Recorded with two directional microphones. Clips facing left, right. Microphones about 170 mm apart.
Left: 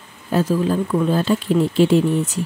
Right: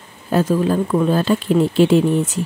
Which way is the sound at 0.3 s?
50° right (ahead or behind).